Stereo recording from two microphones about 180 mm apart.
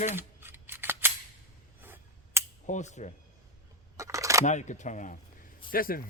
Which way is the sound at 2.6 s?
40° left (ahead or behind).